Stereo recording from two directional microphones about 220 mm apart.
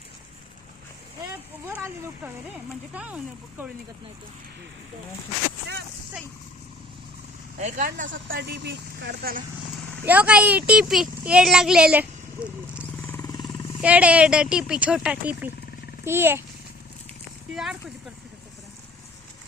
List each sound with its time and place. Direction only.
1.3 s a child's voice: 10° right (ahead or behind)
7.6 s speech: 35° right (ahead or behind)
8.0 s speech: 55° right (ahead or behind)
10.0 s a child's voice: 5° right (ahead or behind)
12.8 s wild animals: 10° left (ahead or behind)
13.8 s a child's voice: 5° right (ahead or behind)
17.5 s a child's voice: centre (ahead or behind)